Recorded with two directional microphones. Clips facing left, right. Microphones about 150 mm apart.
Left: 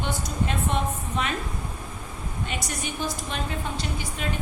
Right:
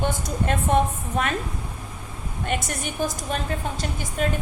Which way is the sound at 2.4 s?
55° right (ahead or behind).